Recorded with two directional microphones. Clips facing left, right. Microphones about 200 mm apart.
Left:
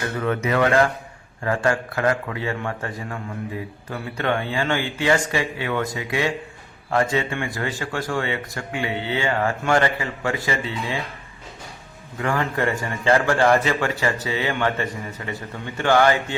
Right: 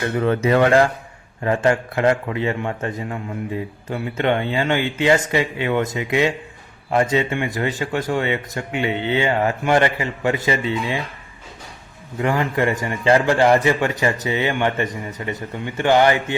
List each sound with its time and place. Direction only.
0.2 s speech: 30° right (ahead or behind)
12.2 s a man's voice: 15° right (ahead or behind)